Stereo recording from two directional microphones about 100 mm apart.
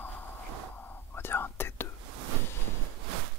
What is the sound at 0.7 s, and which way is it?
Whispering, 20° left (ahead or behind).